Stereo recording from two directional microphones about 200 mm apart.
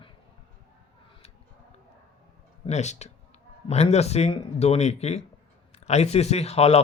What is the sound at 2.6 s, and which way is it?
Speech, 35° left (ahead or behind).